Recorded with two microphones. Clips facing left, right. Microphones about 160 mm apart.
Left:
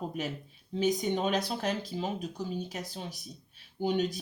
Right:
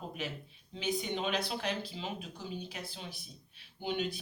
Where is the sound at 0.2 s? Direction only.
45° left (ahead or behind).